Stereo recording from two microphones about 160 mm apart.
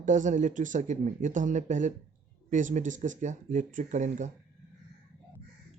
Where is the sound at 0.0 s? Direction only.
50° right (ahead or behind).